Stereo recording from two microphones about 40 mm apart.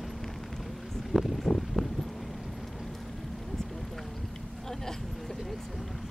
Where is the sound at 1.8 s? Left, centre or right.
Centre.